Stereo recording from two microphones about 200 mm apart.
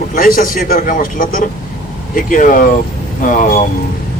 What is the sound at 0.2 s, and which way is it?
A man's voice, 45° left (ahead or behind).